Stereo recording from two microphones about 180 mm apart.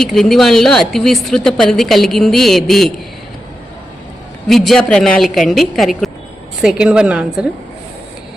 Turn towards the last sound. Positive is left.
turn(degrees=-5)  # may be behind; listen again after turning